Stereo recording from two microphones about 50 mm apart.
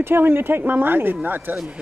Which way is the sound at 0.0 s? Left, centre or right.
Right.